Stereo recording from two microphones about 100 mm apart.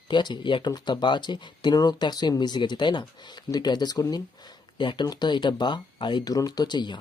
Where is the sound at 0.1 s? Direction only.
50° left (ahead or behind).